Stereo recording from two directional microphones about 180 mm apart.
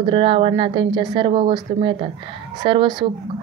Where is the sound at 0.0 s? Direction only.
30° right (ahead or behind).